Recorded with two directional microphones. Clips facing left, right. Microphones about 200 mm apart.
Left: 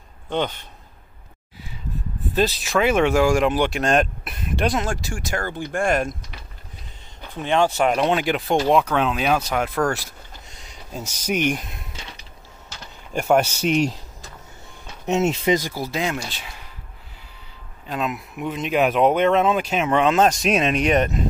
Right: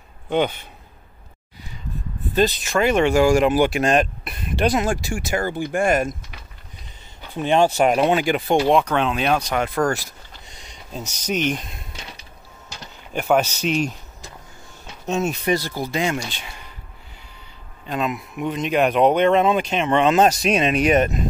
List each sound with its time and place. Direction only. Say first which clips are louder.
0.3 s speech: right 4 dB; 10° right (ahead or behind)
2.3 s speech: right 1 dB; centre (ahead or behind)
7.4 s speech: right 2 dB; 15° right (ahead or behind); by 11.6 s 10° left (ahead or behind)
13.1 s speech: left 1 dB; 5° right (ahead or behind)
15.0 s speech: left 2 dB; 25° left (ahead or behind)
15.7 s speech: right 2 dB; 5° left (ahead or behind)
17.8 s speech: right 2 dB; centre (ahead or behind)